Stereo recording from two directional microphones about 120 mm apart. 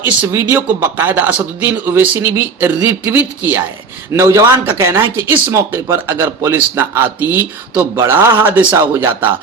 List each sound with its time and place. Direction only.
0.0 s speech: 20° right (ahead or behind)